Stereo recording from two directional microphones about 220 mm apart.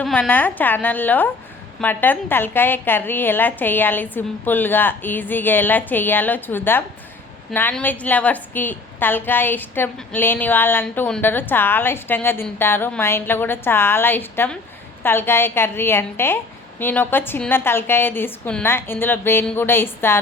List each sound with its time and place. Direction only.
0.0 s a woman's voice: 5° left (ahead or behind)